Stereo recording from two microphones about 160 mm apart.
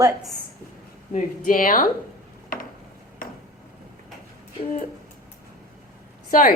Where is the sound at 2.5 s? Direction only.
60° left (ahead or behind).